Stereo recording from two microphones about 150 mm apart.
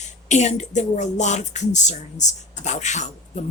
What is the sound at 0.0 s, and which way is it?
A woman's voice, 50° left (ahead or behind).